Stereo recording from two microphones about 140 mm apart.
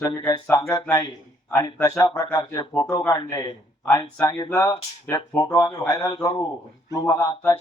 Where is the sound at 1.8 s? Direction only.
25° left (ahead or behind).